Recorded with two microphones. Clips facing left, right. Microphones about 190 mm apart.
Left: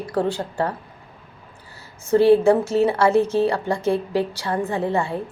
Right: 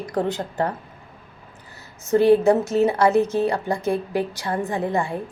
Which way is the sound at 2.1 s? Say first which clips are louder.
Left 1 dB; 15° right (ahead or behind).